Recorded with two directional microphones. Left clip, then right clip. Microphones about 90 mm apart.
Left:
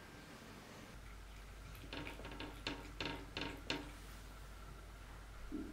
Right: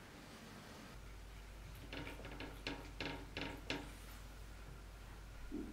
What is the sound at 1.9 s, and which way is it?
Hammer, 10° left (ahead or behind).